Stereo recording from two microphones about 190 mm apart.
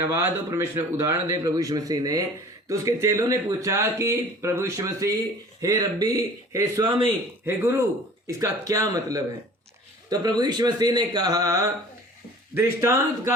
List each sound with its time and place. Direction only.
0.0 s speech: 15° right (ahead or behind)